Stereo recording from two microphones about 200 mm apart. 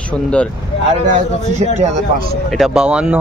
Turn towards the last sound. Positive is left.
turn(degrees=-5)  # may be behind; listen again after turning